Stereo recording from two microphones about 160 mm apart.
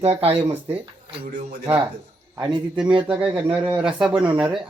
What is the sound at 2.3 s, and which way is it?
Speech, 25° right (ahead or behind).